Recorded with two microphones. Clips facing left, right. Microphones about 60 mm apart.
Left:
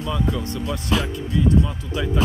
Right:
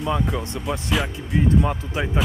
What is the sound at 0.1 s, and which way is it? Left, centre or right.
Speech, right.